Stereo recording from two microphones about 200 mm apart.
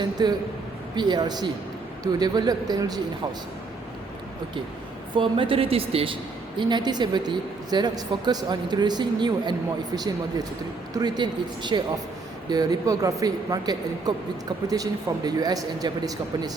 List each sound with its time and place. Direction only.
0.0 s speech: 20° right (ahead or behind)
5.1 s speech: 25° right (ahead or behind)